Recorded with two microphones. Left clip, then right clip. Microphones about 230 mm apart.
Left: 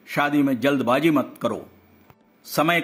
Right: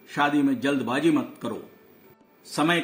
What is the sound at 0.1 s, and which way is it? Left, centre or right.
Speech, left.